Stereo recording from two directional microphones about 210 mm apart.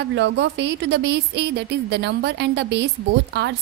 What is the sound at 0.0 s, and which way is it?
A woman's voice, 55° right (ahead or behind).